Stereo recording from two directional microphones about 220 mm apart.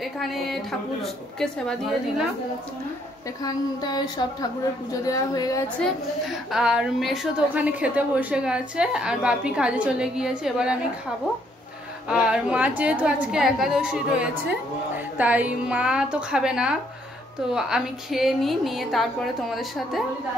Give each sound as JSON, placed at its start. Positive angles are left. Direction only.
{"t": 0.0, "sound": "a woman's voice", "side_deg": 0}
{"t": 3.4, "sound": "speech", "side_deg": 15}
{"t": 6.5, "sound": "a woman's voice", "side_deg": -5}
{"t": 12.1, "sound": "a woman's voice", "side_deg": -5}